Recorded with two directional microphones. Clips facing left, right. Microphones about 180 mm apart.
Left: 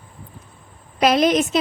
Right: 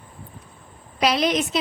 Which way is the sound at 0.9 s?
50° left (ahead or behind).